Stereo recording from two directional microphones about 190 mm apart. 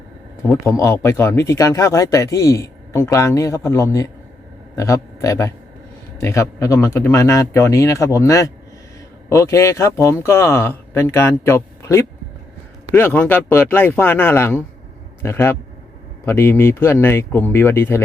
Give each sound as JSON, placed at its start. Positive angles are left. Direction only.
{"t": 0.6, "sound": "a man's voice", "side_deg": 15}